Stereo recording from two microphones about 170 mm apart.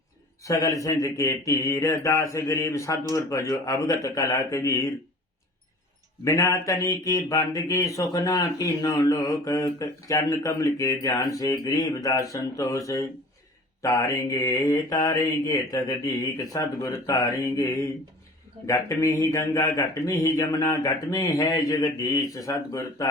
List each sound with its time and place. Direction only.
0.4 s speech: 20° left (ahead or behind)
6.2 s speech: 20° left (ahead or behind)